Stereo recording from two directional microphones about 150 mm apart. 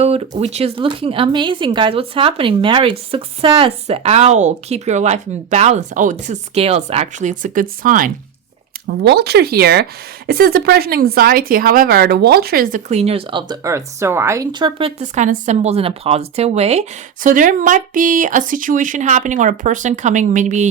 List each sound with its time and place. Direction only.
0.0 s speech: 45° right (ahead or behind); by 8.1 s 65° right (ahead or behind)
8.9 s speech: 90° right; by 12.8 s 70° right (ahead or behind)
12.9 s speech: 45° right (ahead or behind)
13.5 s speech: 20° right (ahead or behind)
14.5 s speech: 35° right (ahead or behind)
17.2 s speech: 65° right (ahead or behind)